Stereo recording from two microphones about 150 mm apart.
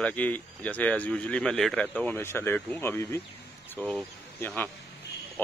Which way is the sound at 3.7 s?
10° left (ahead or behind).